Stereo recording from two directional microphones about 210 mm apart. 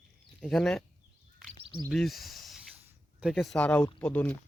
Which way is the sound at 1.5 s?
25° right (ahead or behind).